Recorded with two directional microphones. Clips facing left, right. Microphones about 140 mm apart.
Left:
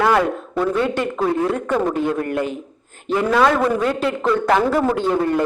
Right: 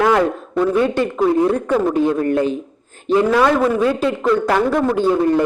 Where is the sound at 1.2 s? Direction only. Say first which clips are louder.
Right 6 dB; 20° right (ahead or behind).